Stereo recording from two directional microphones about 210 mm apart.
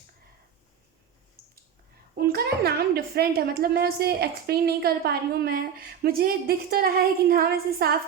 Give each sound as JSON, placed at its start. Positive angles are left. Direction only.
{"t": 2.1, "sound": "a child's voice", "side_deg": -45}